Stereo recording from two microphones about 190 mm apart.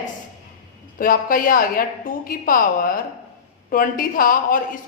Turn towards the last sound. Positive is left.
turn(degrees=45)  # may be behind; listen again after turning